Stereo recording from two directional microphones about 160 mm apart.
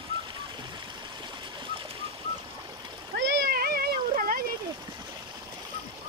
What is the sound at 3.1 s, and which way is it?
Cat, 90° right.